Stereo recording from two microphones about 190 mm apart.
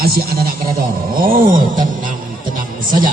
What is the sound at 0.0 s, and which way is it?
A man's voice, 50° right (ahead or behind).